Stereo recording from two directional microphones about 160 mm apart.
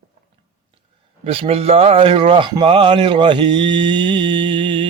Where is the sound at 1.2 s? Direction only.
40° right (ahead or behind).